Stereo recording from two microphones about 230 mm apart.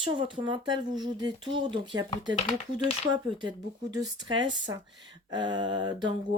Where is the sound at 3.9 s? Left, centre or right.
Centre.